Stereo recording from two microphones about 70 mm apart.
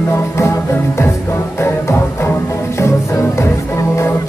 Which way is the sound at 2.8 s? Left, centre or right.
Left.